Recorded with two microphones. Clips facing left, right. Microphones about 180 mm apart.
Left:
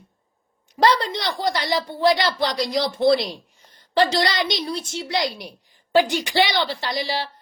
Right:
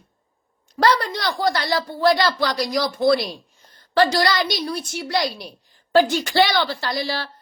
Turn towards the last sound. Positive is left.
turn(degrees=15)  # may be behind; listen again after turning